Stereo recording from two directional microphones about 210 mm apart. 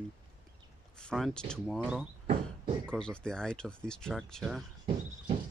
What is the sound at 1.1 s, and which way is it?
Speech, 5° left (ahead or behind).